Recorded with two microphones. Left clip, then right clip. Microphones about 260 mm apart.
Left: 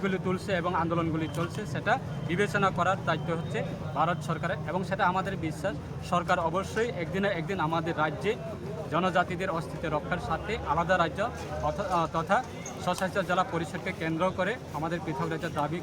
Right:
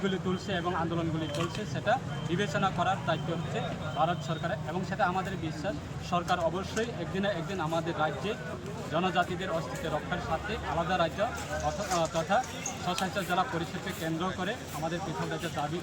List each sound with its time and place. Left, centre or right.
0.0 s a man's voice: centre
10.5 s speech: centre
13.8 s speech: centre